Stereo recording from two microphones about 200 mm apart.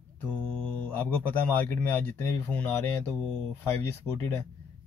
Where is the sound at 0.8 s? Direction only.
10° left (ahead or behind).